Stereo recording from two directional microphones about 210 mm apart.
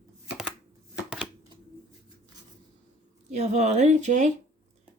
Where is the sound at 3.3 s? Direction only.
35° right (ahead or behind).